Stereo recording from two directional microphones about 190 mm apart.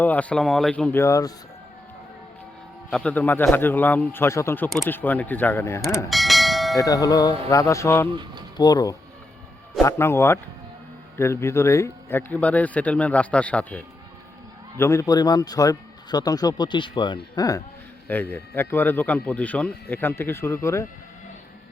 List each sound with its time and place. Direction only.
0.0 s speech: 10° left (ahead or behind)
1.0 s speech: 15° left (ahead or behind)
2.9 s speech: 5° left (ahead or behind)
6.1 s bell: centre (ahead or behind)
6.7 s a man's voice: 20° left (ahead or behind)
18.1 s speech: 10° left (ahead or behind)